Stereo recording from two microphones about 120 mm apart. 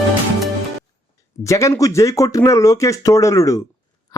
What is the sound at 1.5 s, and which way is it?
A man's voice, 25° left (ahead or behind).